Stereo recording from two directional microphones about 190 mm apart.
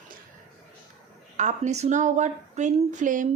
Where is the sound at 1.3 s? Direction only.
40° right (ahead or behind).